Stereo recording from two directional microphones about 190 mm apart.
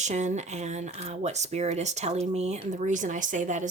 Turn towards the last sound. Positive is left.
turn(degrees=-40)  # may be behind; listen again after turning